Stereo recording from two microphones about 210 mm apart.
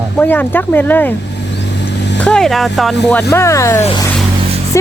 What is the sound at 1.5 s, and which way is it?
Vehicle, 55° left (ahead or behind).